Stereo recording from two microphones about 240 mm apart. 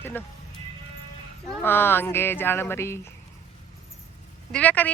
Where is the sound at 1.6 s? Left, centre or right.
Centre.